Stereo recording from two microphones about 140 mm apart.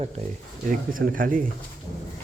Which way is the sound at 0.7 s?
80° right.